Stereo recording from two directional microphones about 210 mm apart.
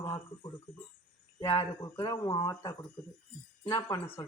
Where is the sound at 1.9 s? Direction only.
15° left (ahead or behind).